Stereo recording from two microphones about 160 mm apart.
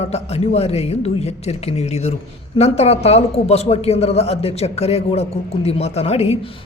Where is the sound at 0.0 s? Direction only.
40° left (ahead or behind).